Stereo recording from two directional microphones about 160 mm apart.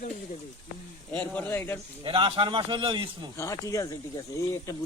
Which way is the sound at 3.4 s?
20° left (ahead or behind).